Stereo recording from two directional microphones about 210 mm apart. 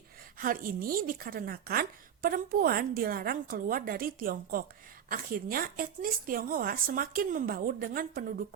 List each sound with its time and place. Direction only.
0.3 s a woman's voice: 40° right (ahead or behind)